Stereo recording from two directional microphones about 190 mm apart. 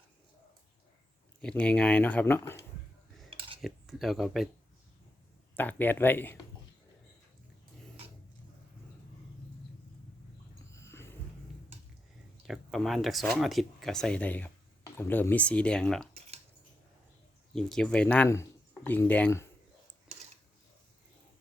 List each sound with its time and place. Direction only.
1.4 s speech: 5° left (ahead or behind)
3.2 s cutlery: 30° right (ahead or behind)
3.6 s speech: centre (ahead or behind)
5.5 s speech: 10° left (ahead or behind)
10.7 s a sound: 15° left (ahead or behind)
12.5 s speech: centre (ahead or behind)
17.5 s speech: 5° left (ahead or behind)